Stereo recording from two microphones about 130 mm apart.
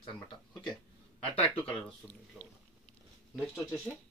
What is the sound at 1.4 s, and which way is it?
Speech, 10° left (ahead or behind).